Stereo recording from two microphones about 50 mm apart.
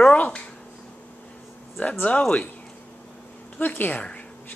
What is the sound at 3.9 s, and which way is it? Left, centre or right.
Speech, left.